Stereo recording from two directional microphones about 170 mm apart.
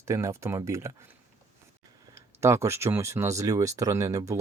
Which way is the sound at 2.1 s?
15° right (ahead or behind).